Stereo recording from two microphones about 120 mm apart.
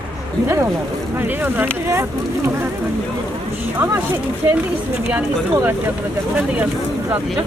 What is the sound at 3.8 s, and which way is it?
Speech, 15° right (ahead or behind).